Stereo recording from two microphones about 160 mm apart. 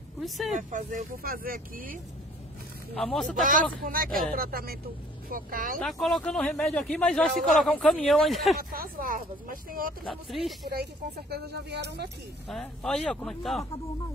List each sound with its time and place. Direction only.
0.2 s speech: centre (ahead or behind)
0.6 s speech: 55° right (ahead or behind)
2.9 s speech: centre (ahead or behind)
3.8 s speech: 65° right (ahead or behind)
5.8 s speech: centre (ahead or behind)
8.5 s speech: 65° right (ahead or behind)
10.0 s speech: centre (ahead or behind)
10.7 s speech: 85° right
12.4 s speech: centre (ahead or behind)